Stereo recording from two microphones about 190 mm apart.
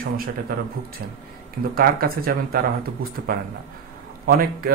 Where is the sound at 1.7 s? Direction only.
50° right (ahead or behind).